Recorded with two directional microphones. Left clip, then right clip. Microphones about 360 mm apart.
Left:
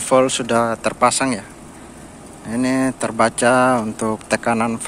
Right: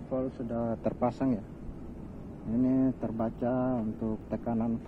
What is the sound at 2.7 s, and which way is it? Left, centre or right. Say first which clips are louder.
Speech: left 13 dB; centre.